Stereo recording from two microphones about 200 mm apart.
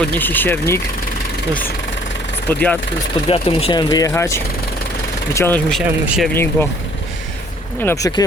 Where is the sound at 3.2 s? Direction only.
25° left (ahead or behind); by 6.3 s centre (ahead or behind).